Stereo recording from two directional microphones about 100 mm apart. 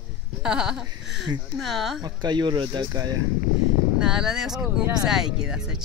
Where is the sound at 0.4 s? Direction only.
5° right (ahead or behind).